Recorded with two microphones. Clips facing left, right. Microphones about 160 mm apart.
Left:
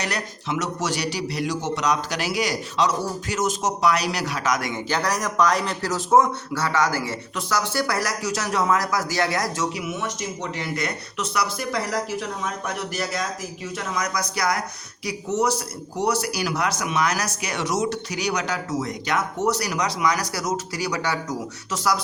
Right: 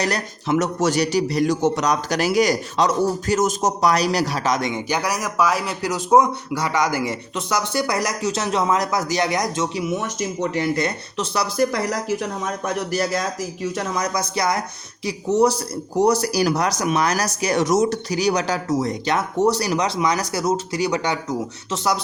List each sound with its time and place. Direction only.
0.0 s a man's voice: 40° right (ahead or behind)
4.7 s a man's voice: 10° right (ahead or behind)
9.7 s speech: 35° right (ahead or behind)
10.8 s speech: 30° right (ahead or behind)
11.7 s speech: 45° right (ahead or behind); by 21.9 s 25° right (ahead or behind)